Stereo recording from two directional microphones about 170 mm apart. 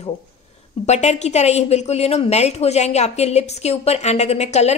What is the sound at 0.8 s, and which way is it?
A woman's voice, 40° left (ahead or behind).